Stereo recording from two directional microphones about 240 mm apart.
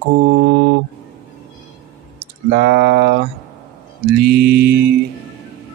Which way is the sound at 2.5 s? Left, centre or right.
Right.